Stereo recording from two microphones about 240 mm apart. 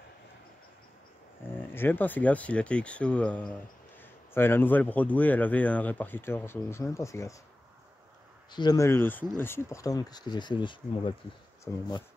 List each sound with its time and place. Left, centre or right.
1.5 s speech: centre
8.5 s speech: centre
11.7 s speech: centre